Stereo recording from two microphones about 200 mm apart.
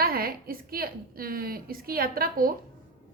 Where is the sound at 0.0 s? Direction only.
50° right (ahead or behind).